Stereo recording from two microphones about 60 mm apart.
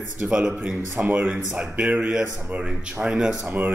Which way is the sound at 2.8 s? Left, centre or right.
Centre.